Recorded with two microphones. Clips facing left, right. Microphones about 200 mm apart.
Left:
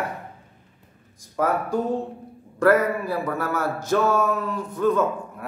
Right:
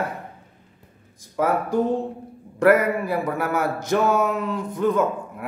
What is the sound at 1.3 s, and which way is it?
A man's voice, 20° right (ahead or behind).